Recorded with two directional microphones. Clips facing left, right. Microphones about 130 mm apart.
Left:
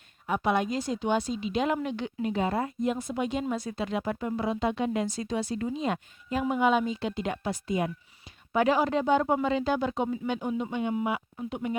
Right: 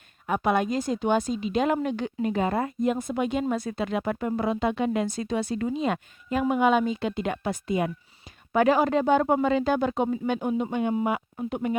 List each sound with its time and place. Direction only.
0.3 s a woman's voice: 50° right (ahead or behind)
8.5 s a woman's voice: 50° right (ahead or behind)